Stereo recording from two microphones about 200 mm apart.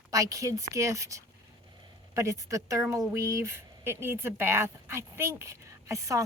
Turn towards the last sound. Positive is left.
turn(degrees=-15)  # may be behind; listen again after turning